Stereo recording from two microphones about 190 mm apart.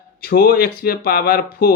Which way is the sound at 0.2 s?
55° left (ahead or behind).